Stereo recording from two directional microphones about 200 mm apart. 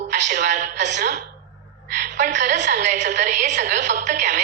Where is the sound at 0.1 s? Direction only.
40° right (ahead or behind).